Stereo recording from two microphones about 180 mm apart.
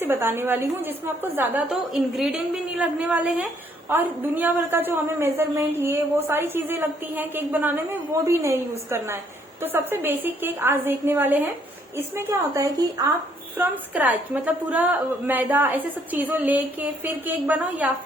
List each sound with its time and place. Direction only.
0.0 s a woman's voice: 10° right (ahead or behind)